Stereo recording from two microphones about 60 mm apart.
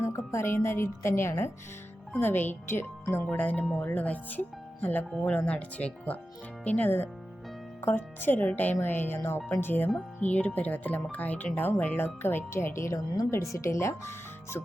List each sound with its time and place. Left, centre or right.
0.0 s a woman's voice: left
2.1 s speech: left
3.3 s speech: left
10.2 s a woman's voice: left